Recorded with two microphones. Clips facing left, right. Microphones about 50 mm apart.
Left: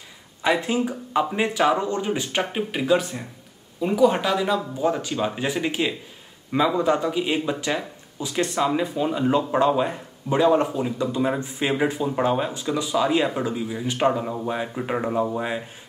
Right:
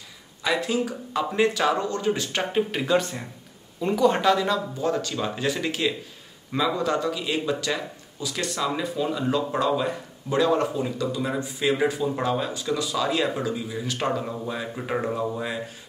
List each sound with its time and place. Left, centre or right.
0.4 s speech: left
2.8 s speech: centre; by 14.7 s left
14.8 s speech: centre
15.1 s speech: left